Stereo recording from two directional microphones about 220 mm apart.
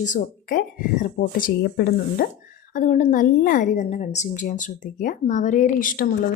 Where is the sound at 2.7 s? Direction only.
35° left (ahead or behind).